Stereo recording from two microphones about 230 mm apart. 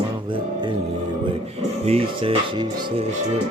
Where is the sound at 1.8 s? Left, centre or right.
Right.